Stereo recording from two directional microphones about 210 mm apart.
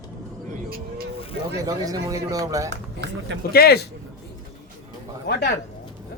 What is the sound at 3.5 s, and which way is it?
Speech, 50° left (ahead or behind).